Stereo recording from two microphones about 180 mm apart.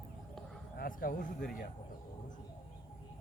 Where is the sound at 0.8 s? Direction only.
50° left (ahead or behind).